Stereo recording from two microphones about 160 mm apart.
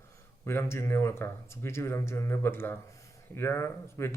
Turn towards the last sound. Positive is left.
turn(degrees=15)  # may be behind; listen again after turning